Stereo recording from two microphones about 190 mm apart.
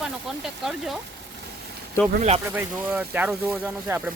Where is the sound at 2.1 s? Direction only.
35° right (ahead or behind).